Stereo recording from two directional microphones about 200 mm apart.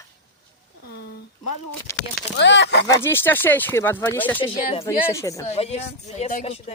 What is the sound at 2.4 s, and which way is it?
Speech, 60° left (ahead or behind).